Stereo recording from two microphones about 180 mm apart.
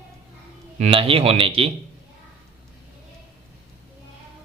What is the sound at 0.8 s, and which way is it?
Speech, 30° right (ahead or behind).